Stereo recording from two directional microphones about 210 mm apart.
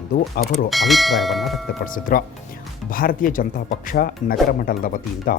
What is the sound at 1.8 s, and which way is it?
Speech, 40° left (ahead or behind).